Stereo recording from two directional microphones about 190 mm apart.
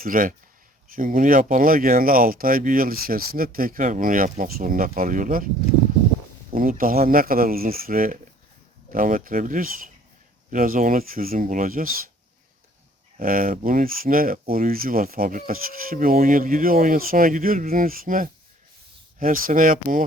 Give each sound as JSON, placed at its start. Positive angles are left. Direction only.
{"t": 0.0, "sound": "speech", "side_deg": -45}
{"t": 6.5, "sound": "speech", "side_deg": -50}
{"t": 13.1, "sound": "speech", "side_deg": -50}